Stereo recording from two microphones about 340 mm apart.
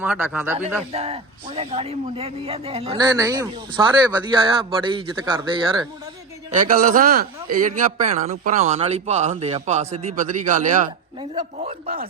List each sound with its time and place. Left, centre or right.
0.0 s speech: centre
0.9 s speech: centre
6.5 s a man's voice: right